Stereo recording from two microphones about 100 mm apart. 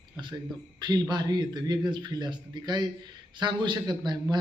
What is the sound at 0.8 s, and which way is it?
A man's voice, 45° right (ahead or behind).